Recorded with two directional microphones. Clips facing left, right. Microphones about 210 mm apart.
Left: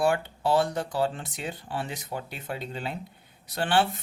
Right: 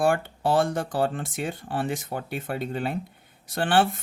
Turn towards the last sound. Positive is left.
turn(degrees=-50)  # may be behind; listen again after turning